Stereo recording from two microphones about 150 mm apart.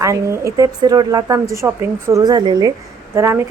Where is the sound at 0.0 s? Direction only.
20° right (ahead or behind).